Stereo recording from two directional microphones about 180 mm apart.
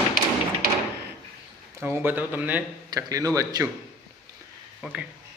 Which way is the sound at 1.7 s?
15° right (ahead or behind).